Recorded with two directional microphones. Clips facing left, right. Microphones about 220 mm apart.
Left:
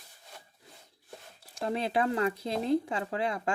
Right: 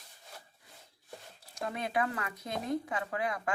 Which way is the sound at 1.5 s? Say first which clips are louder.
Left 4 dB; 30° left (ahead or behind).